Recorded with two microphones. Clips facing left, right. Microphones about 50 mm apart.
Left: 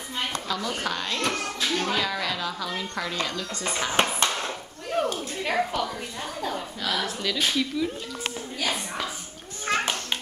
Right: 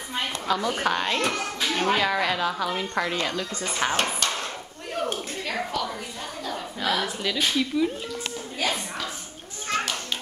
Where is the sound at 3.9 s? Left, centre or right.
Centre.